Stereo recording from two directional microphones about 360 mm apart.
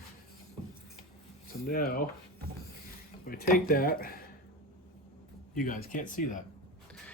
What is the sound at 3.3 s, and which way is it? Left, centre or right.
Speech, left.